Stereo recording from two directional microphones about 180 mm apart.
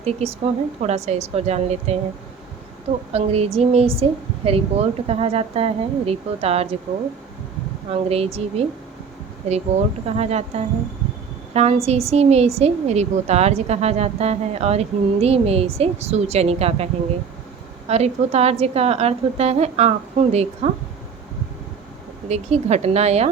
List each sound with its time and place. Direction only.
0.0 s a woman's voice: 35° right (ahead or behind)
3.1 s a woman's voice: 35° right (ahead or behind)
7.9 s a woman's voice: 35° right (ahead or behind)
11.5 s a woman's voice: 35° right (ahead or behind)
22.3 s a woman's voice: 35° right (ahead or behind)